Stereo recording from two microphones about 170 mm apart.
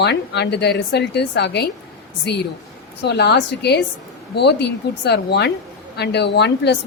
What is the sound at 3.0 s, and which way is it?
Speech, 80° left.